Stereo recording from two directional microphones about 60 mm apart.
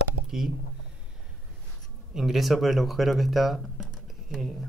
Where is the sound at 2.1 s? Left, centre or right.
Centre.